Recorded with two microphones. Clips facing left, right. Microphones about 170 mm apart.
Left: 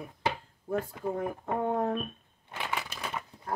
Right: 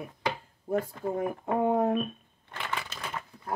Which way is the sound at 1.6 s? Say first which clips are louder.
Right 4 dB; 15° right (ahead or behind).